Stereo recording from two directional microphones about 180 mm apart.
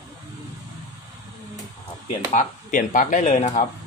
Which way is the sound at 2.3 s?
45° left (ahead or behind).